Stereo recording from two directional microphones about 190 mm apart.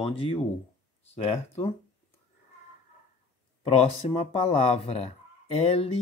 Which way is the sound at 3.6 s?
35° left (ahead or behind).